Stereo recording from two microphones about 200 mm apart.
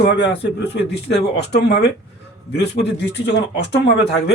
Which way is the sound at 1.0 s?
55° left (ahead or behind).